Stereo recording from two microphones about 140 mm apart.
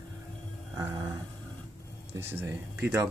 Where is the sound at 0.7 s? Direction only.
25° right (ahead or behind).